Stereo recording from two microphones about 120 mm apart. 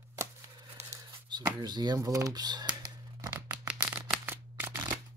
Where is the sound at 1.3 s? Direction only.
40° right (ahead or behind).